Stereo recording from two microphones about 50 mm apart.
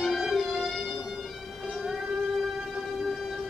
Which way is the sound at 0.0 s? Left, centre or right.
Centre.